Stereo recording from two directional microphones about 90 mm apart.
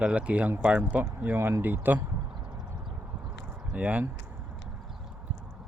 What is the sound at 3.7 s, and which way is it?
Speech, 15° right (ahead or behind).